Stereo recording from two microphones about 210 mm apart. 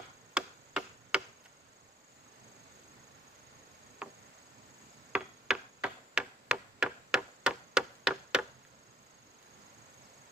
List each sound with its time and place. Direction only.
0.3 s tick-tock: 5° right (ahead or behind)
4.0 s a sound: 5° right (ahead or behind)
5.1 s tick-tock: 5° right (ahead or behind)